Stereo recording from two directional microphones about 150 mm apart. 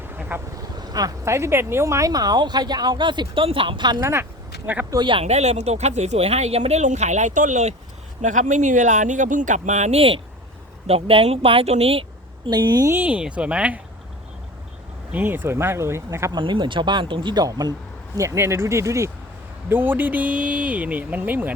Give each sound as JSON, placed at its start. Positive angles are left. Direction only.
{"t": 0.1, "sound": "vehicle", "side_deg": -10}
{"t": 0.8, "sound": "speech", "side_deg": -25}
{"t": 4.6, "sound": "speech", "side_deg": -10}
{"t": 4.9, "sound": "speech", "side_deg": -35}
{"t": 5.2, "sound": "speech", "side_deg": -45}
{"t": 12.5, "sound": "speech", "side_deg": -25}
{"t": 12.9, "sound": "speech", "side_deg": -10}
{"t": 15.1, "sound": "speech", "side_deg": -15}
{"t": 16.3, "sound": "speech", "side_deg": -30}